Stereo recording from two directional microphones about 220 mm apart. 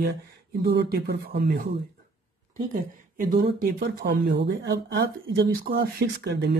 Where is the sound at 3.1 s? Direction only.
40° right (ahead or behind).